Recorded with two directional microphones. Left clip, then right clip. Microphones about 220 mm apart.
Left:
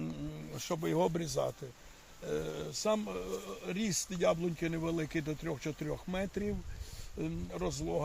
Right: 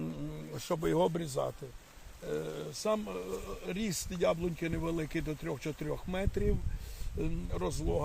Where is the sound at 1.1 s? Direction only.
10° right (ahead or behind).